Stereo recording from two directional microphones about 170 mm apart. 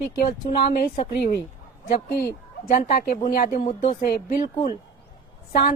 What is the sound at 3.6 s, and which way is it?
Speech, 40° left (ahead or behind).